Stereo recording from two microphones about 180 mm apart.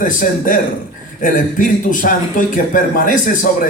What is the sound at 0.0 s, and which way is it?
A woman's voice, 50° left (ahead or behind).